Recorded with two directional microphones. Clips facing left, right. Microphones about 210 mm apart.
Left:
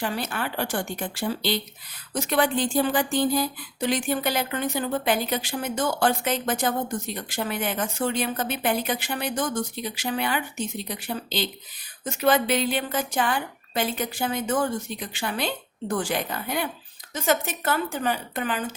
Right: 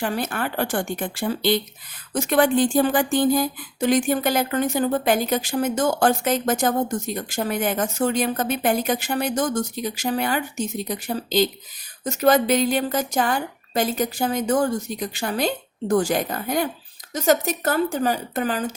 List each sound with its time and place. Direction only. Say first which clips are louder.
0.0 s a woman's voice: right 4 dB; 50° right (ahead or behind)